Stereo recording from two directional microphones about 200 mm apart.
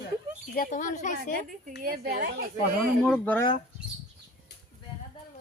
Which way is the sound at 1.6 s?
45° right (ahead or behind).